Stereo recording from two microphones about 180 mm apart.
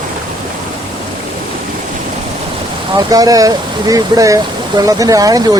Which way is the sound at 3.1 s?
20° right (ahead or behind).